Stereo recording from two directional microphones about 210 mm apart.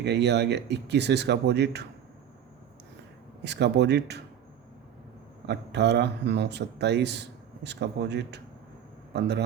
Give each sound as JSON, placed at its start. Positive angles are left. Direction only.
{"t": 0.0, "sound": "speech", "side_deg": -55}
{"t": 3.4, "sound": "speech", "side_deg": -55}
{"t": 5.5, "sound": "speech", "side_deg": -55}